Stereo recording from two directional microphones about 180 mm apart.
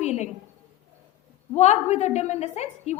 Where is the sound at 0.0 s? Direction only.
40° left (ahead or behind).